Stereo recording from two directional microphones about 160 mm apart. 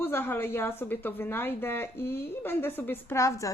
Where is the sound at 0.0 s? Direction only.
15° left (ahead or behind).